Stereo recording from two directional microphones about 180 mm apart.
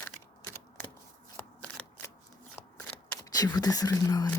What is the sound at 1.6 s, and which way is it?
Shuffling cards, 5° left (ahead or behind).